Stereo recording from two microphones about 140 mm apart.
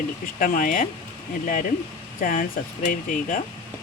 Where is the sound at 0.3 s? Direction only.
70° left (ahead or behind).